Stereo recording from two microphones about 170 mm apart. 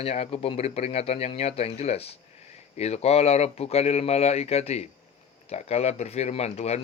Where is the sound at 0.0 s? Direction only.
35° left (ahead or behind).